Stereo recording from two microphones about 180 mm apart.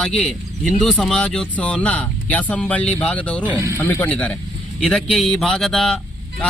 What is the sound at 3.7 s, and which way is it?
Speech, 10° left (ahead or behind).